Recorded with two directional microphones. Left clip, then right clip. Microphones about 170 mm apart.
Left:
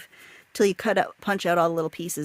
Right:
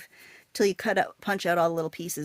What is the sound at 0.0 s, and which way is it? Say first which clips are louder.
Speech: left 3 dB; 35° left (ahead or behind).